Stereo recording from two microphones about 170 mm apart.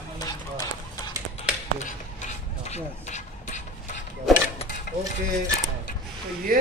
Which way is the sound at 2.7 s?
45° left (ahead or behind).